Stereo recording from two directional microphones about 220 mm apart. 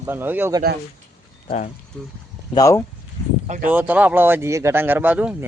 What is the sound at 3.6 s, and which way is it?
Speech, 5° right (ahead or behind).